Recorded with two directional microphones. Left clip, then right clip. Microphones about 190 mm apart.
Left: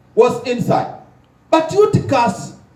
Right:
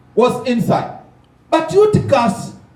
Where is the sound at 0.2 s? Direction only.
45° left (ahead or behind).